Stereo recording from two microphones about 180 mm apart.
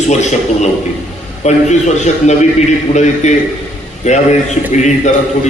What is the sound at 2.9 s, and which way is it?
Speech, 30° left (ahead or behind).